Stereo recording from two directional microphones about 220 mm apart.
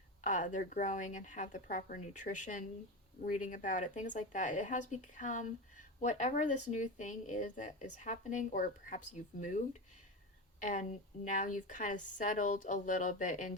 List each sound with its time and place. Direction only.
0.2 s speech: 35° left (ahead or behind)
10.6 s a woman's voice: 35° left (ahead or behind)